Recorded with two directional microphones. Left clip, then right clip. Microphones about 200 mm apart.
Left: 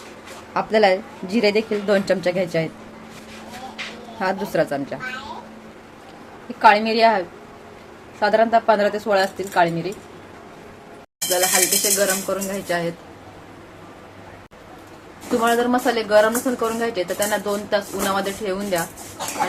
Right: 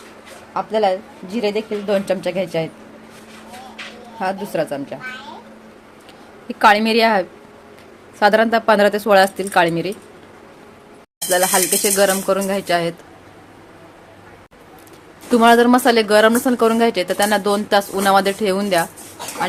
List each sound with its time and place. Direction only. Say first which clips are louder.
0.5 s speech: left 1 dB; centre (ahead or behind)
4.2 s speech: even; 5° right (ahead or behind)
6.6 s speech: right 1 dB; 40° right (ahead or behind)
11.3 s speech: right 3 dB; 55° right (ahead or behind)
15.4 s speech: right 7 dB; 55° right (ahead or behind)